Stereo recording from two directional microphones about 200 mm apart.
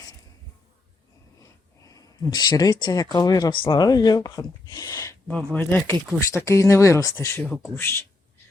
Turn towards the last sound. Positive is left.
turn(degrees=10)  # may be behind; listen again after turning